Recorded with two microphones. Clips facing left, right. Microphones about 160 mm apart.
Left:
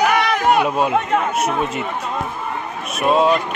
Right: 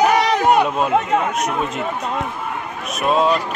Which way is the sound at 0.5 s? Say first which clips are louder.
Even; 5° left (ahead or behind).